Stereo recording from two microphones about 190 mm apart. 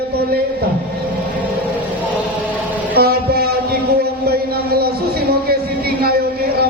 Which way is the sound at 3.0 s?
55° right (ahead or behind).